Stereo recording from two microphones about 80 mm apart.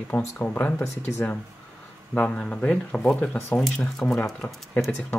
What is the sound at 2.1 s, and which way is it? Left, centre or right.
Speech, centre.